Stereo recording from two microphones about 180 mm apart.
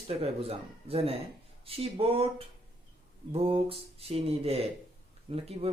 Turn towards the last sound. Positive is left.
turn(degrees=-35)  # may be behind; listen again after turning